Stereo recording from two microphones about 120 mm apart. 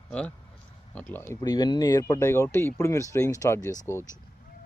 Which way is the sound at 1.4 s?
35° left (ahead or behind).